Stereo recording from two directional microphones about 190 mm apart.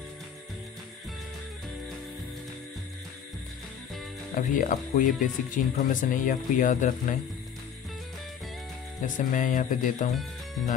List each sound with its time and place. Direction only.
4.4 s speech: 45° left (ahead or behind)
9.0 s speech: 45° left (ahead or behind)